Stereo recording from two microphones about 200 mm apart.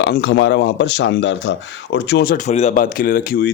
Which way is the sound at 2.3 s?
35° left (ahead or behind).